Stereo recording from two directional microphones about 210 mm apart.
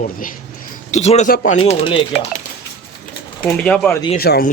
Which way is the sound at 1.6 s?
25° left (ahead or behind).